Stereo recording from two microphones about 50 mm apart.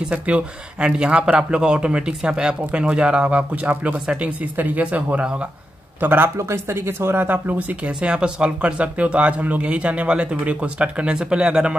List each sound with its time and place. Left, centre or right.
0.1 s speech: right
5.9 s speech: right
6.3 s speech: right
7.2 s speech: right
7.8 s speech: right